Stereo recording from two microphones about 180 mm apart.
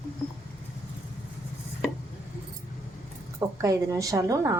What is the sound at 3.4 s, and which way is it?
A woman's voice, 15° right (ahead or behind).